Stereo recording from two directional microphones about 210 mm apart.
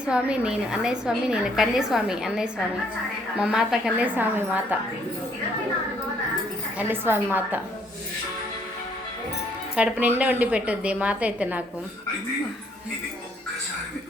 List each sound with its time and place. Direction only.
0.0 s a woman's voice: 5° right (ahead or behind)
6.7 s a woman's voice: 10° right (ahead or behind)
9.7 s a woman's voice: 5° right (ahead or behind)